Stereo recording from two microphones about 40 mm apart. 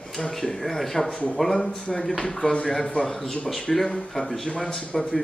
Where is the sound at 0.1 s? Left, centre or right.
Centre.